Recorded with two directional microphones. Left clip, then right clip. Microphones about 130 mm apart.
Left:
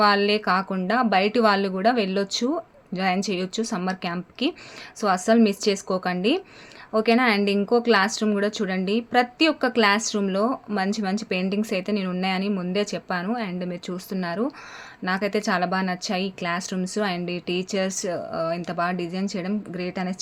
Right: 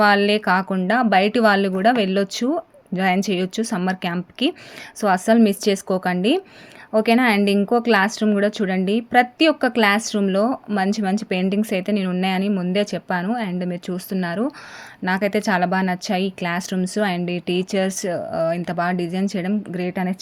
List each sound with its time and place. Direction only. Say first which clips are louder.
0.0 s speech: right 3 dB; 35° right (ahead or behind)